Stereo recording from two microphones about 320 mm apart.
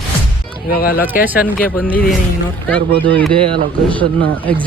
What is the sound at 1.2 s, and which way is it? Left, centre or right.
Speech, centre.